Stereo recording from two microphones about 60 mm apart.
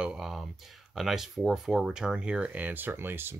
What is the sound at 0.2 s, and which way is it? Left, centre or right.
Speech, centre.